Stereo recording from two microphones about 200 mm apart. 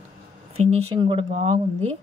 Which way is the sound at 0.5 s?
30° right (ahead or behind).